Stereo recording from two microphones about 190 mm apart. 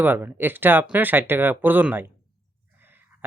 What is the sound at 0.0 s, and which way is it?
Speech, 10° right (ahead or behind).